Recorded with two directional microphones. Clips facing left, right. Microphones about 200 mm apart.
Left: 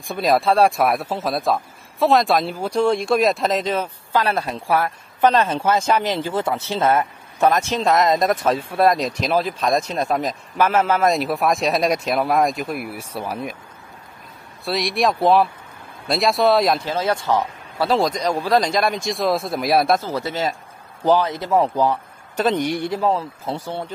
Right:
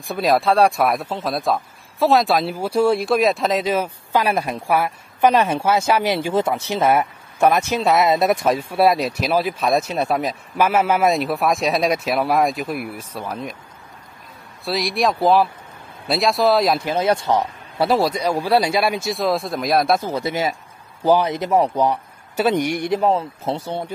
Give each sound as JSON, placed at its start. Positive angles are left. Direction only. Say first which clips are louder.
{"t": 0.0, "sound": "speech", "louder": "even", "side_deg": 0}
{"t": 14.6, "sound": "speech", "louder": "even", "side_deg": 0}
{"t": 16.8, "sound": "speech", "louder": "right 3 dB", "side_deg": -15}
{"t": 17.9, "sound": "speech", "louder": "even", "side_deg": -10}
{"t": 20.0, "sound": "speech", "louder": "right 2 dB", "side_deg": -15}